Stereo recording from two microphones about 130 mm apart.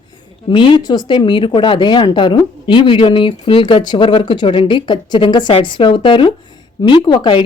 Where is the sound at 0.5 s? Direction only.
40° left (ahead or behind).